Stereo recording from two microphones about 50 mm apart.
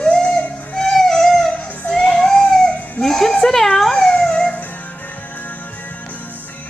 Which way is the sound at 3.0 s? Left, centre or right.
Centre.